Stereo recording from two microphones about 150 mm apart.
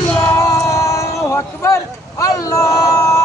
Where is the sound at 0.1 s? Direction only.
15° left (ahead or behind).